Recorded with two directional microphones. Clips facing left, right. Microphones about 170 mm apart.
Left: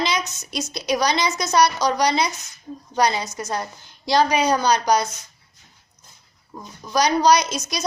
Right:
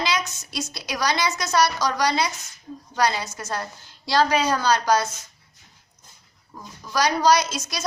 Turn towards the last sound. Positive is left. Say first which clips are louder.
# left 2 dB
turn(degrees=20)  # may be behind; listen again after turning